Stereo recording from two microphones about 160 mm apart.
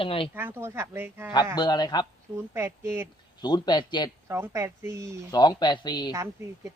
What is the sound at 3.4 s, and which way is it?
Speech, 25° left (ahead or behind).